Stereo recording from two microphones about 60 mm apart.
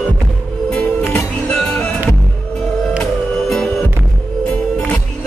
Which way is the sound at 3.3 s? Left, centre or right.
Centre.